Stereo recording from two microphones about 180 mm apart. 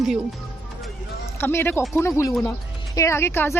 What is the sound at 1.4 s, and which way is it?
Speech, 10° left (ahead or behind).